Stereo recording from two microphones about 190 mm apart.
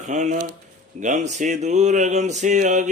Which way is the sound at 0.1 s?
40° right (ahead or behind).